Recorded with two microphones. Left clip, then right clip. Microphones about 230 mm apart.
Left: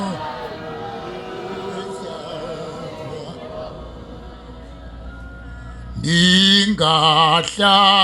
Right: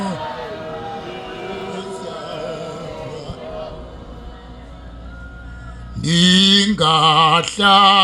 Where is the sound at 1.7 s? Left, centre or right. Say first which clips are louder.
Right 1 dB; right.